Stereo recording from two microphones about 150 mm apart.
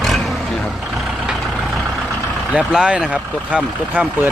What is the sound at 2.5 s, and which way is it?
Speech, 5° right (ahead or behind).